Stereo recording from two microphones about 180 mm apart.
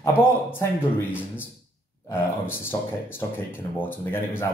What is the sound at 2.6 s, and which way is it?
Speech, 10° left (ahead or behind).